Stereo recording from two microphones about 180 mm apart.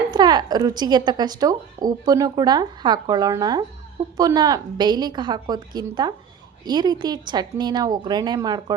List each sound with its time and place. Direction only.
0.1 s a woman's voice: 25° right (ahead or behind)